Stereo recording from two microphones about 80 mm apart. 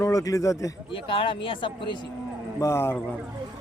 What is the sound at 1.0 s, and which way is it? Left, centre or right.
Speech, left.